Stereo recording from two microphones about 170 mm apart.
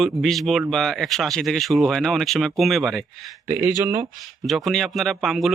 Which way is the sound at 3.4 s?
15° right (ahead or behind).